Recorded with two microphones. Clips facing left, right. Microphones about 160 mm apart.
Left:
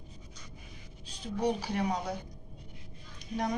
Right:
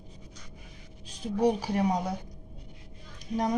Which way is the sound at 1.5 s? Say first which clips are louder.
Right 4 dB; 45° right (ahead or behind).